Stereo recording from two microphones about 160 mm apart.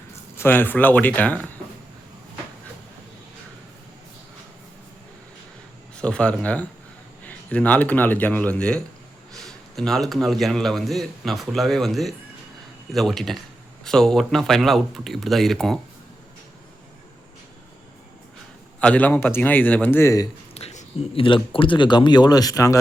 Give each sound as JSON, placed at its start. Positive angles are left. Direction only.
{"t": 0.3, "sound": "speech", "side_deg": 15}
{"t": 6.0, "sound": "a man's voice", "side_deg": 5}
{"t": 18.8, "sound": "speech", "side_deg": 10}
{"t": 20.5, "sound": "speech", "side_deg": 40}